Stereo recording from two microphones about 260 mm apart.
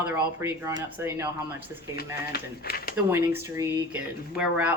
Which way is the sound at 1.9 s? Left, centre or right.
Left.